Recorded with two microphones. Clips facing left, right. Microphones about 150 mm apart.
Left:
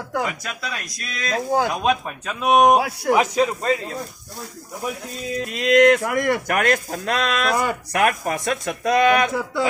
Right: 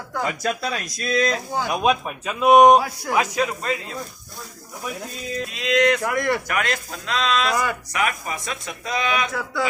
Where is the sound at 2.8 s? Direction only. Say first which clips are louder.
Left 6 dB; 70° left (ahead or behind).